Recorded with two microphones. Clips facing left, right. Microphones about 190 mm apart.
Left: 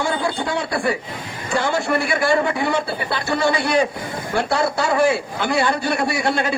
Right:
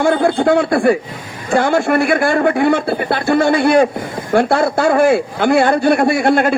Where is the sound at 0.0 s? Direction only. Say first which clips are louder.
Right 9 dB; 55° right (ahead or behind).